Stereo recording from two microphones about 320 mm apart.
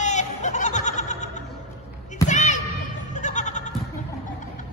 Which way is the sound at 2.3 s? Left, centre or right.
Left.